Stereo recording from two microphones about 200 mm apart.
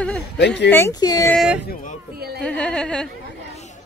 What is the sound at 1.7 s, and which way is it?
Speech, 40° left (ahead or behind).